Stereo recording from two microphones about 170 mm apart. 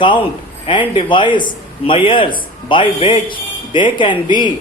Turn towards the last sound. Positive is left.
turn(degrees=25)  # may be behind; listen again after turning